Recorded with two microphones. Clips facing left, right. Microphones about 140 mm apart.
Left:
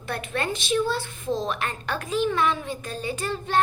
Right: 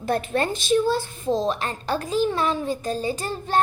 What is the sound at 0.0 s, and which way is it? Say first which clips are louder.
A child's voice: right 6 dB; 40° right (ahead or behind).